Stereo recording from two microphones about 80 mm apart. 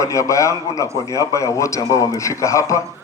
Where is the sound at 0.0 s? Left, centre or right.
Left.